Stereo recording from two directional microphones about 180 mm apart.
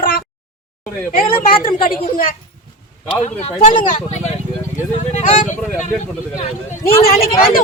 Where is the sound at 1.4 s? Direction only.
50° left (ahead or behind).